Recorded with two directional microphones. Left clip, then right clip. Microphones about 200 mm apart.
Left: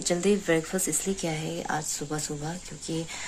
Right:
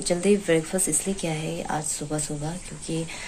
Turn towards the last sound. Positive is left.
turn(degrees=25)  # may be behind; listen again after turning